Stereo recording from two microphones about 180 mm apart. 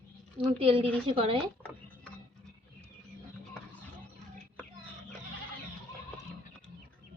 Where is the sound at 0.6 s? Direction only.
30° right (ahead or behind).